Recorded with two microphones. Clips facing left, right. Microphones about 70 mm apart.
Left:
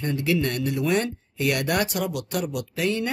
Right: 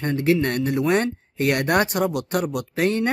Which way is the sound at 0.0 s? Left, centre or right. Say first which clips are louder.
Right 4 dB; right.